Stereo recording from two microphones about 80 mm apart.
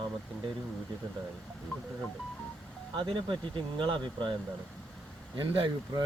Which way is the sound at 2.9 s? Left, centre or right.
Right.